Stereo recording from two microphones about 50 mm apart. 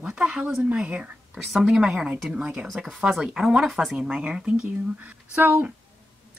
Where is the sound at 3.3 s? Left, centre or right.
Centre.